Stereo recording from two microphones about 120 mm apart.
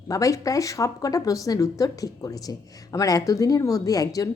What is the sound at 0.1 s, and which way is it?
A woman's voice, 30° left (ahead or behind).